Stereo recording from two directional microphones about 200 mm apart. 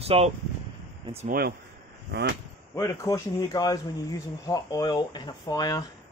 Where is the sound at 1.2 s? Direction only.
45° right (ahead or behind).